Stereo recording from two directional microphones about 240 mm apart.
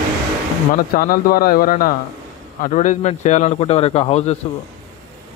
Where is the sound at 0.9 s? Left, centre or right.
Left.